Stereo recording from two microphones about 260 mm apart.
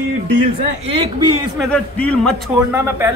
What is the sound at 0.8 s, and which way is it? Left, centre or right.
Speech, right.